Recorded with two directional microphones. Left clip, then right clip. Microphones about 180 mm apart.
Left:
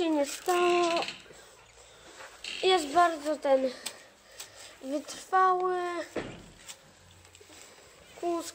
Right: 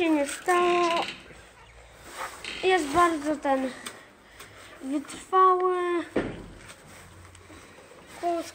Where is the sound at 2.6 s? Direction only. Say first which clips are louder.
Right 2 dB; 35° left (ahead or behind).